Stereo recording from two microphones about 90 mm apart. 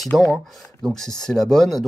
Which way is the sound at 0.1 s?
Centre (ahead or behind).